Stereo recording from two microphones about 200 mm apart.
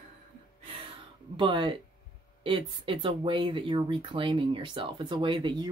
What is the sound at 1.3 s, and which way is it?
Speech, 25° right (ahead or behind).